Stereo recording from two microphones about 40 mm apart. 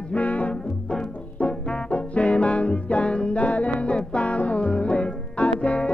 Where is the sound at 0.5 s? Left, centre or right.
Left.